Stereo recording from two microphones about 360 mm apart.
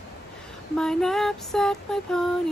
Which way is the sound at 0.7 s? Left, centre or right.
Centre.